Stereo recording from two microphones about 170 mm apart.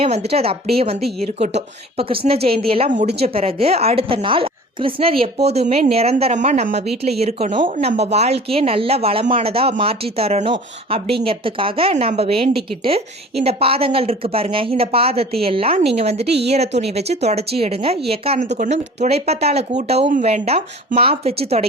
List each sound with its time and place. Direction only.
0.0 s a woman's voice: 35° right (ahead or behind)